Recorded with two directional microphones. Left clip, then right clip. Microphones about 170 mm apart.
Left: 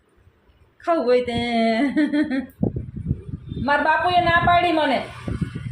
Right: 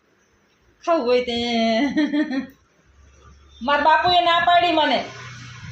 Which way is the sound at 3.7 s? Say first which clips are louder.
Right 2 dB; 10° right (ahead or behind).